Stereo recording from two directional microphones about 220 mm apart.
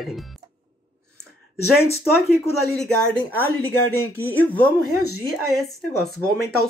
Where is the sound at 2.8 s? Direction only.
5° left (ahead or behind).